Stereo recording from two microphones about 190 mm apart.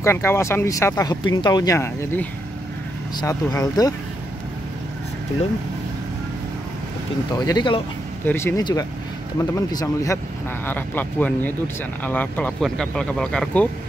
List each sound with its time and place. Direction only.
0.0 s speech: 15° left (ahead or behind)
7.3 s speech: 20° left (ahead or behind)
8.3 s speech: 10° left (ahead or behind)
10.7 s speech: 10° left (ahead or behind)